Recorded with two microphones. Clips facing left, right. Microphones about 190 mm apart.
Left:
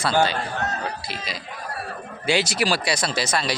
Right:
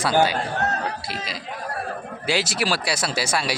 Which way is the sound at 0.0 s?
15° right (ahead or behind).